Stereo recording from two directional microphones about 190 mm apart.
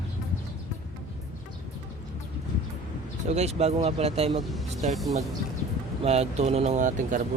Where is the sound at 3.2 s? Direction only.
35° right (ahead or behind).